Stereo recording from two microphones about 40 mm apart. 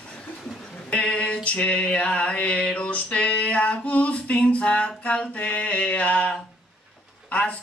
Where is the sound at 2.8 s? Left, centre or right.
Left.